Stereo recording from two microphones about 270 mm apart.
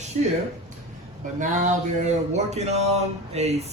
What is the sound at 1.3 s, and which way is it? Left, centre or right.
Speech, right.